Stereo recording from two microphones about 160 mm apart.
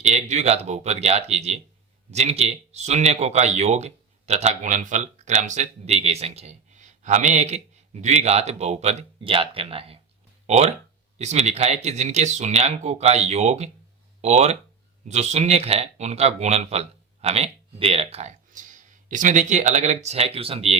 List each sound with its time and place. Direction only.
0.0 s speech: 45° right (ahead or behind)